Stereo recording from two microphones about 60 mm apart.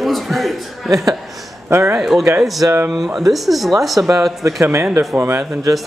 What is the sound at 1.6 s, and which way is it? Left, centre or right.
Speech, right.